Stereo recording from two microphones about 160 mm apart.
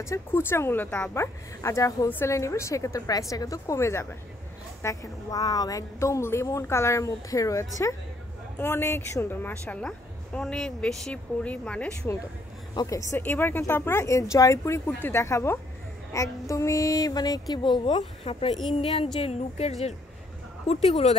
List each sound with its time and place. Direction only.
0.0 s a woman's voice: 15° left (ahead or behind)
12.7 s a woman's voice: 20° left (ahead or behind); by 21.2 s 40° left (ahead or behind)